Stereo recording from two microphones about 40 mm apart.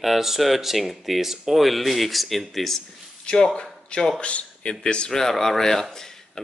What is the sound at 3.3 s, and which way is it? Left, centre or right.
Speech, left.